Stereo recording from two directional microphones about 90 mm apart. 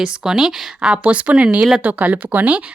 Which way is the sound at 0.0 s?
5° right (ahead or behind).